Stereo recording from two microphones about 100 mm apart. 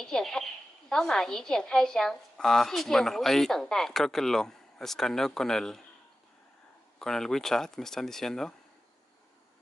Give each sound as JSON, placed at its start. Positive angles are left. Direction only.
{"t": 0.0, "sound": "speech", "side_deg": 5}
{"t": 7.0, "sound": "speech", "side_deg": 5}